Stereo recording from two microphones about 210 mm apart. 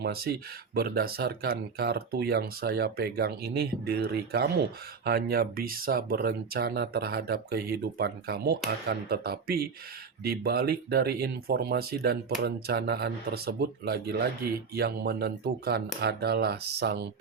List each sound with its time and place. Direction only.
0.0 s speech: 50° right (ahead or behind)